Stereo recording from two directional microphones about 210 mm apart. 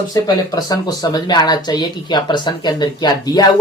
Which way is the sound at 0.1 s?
15° left (ahead or behind).